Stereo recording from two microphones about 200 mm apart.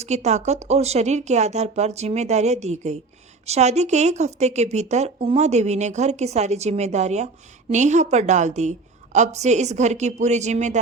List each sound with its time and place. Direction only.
0.0 s a woman's voice: 35° right (ahead or behind)